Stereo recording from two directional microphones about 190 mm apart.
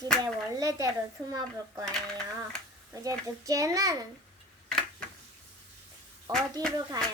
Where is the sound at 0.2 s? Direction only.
15° right (ahead or behind).